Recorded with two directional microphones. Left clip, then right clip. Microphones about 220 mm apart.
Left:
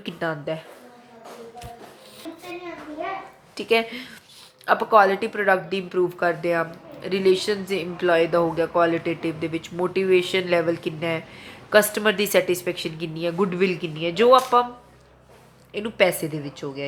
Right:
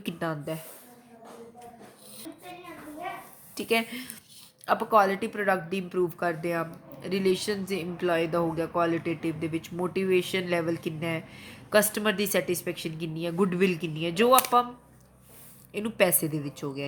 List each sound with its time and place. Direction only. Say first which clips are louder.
0.0 s a woman's voice: left 5 dB; 20° right (ahead or behind)
3.5 s a woman's voice: left 6 dB; 20° right (ahead or behind)
15.7 s a woman's voice: left 5 dB; 20° right (ahead or behind)